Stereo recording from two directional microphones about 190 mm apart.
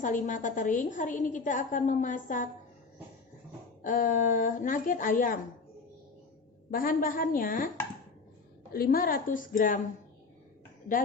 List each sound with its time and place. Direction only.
0.0 s a woman's voice: 45° left (ahead or behind)
3.8 s a woman's voice: 45° left (ahead or behind)
6.7 s a woman's voice: 50° left (ahead or behind)
8.7 s a woman's voice: 50° left (ahead or behind)